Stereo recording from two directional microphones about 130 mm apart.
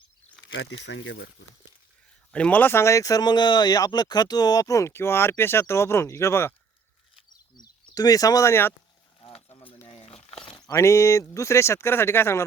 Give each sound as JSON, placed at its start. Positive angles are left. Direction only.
{"t": 2.3, "sound": "speech", "side_deg": 10}
{"t": 7.5, "sound": "speech", "side_deg": 30}
{"t": 9.2, "sound": "a sound", "side_deg": 45}
{"t": 9.8, "sound": "crumpling", "side_deg": 45}
{"t": 10.2, "sound": "a sound", "side_deg": 45}
{"t": 10.6, "sound": "speech", "side_deg": 20}